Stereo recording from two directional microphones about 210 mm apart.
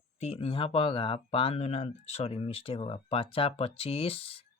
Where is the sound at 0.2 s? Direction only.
30° left (ahead or behind).